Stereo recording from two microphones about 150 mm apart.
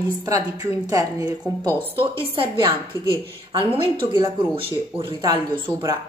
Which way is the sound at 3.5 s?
35° right (ahead or behind).